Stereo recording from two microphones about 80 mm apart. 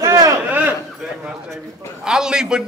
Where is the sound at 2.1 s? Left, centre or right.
Centre.